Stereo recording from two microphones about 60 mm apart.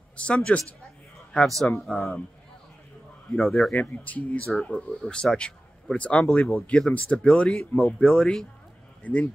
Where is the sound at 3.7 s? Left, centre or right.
Left.